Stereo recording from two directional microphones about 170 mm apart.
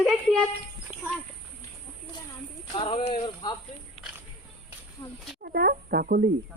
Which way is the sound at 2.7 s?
30° left (ahead or behind).